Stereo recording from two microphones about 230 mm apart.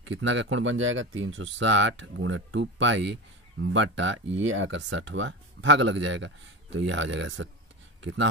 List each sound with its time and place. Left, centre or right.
0.0 s speech: right